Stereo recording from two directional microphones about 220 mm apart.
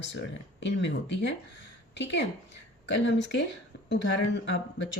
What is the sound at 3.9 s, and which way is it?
Speech, 50° left (ahead or behind).